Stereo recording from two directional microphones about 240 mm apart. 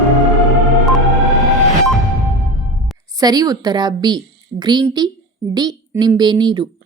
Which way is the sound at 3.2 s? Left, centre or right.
Centre.